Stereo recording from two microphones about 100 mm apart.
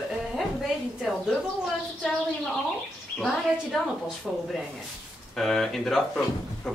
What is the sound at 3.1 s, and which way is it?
Speech, centre (ahead or behind).